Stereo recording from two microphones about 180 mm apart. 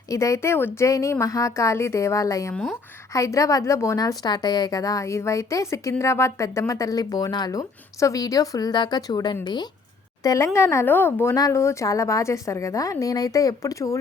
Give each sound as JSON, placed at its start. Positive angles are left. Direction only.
{"t": 0.1, "sound": "a woman's voice", "side_deg": 15}